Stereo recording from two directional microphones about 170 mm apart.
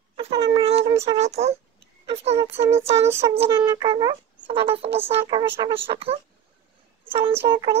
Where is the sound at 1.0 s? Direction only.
40° right (ahead or behind).